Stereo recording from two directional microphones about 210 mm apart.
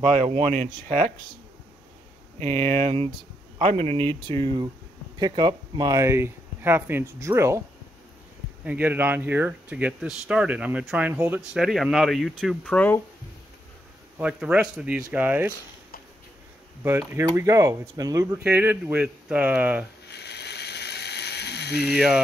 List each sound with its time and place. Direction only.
0.0 s speech: 35° right (ahead or behind)
2.7 s speech: 25° right (ahead or behind)
8.6 s speech: 10° right (ahead or behind)
14.1 s speech: 5° right (ahead or behind)
17.1 s speech: 15° right (ahead or behind)
20.1 s mechanisms: 50° left (ahead or behind)
21.9 s speech: centre (ahead or behind)